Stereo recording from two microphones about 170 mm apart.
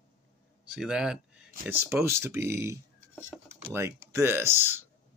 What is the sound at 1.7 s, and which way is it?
Speech, 15° right (ahead or behind).